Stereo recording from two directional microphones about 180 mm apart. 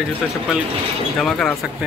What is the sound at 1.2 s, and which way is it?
Speech, 5° left (ahead or behind).